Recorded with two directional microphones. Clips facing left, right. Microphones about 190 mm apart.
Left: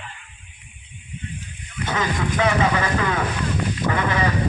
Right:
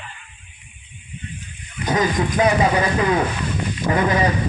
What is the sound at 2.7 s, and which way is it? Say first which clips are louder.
Speech: right 4 dB; 20° right (ahead or behind).